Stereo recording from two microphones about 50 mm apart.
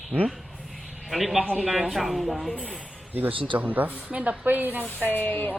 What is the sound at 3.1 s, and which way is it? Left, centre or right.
A woman's voice, right.